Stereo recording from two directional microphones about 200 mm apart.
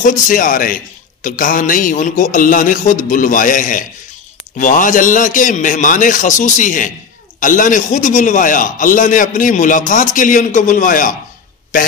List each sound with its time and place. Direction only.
0.0 s a man's voice: 40° left (ahead or behind)